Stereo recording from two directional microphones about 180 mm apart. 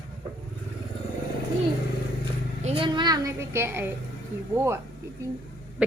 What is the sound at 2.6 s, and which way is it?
A woman's voice, 30° right (ahead or behind).